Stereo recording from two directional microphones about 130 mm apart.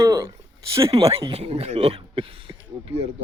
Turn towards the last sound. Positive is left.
turn(degrees=-50)  # may be behind; listen again after turning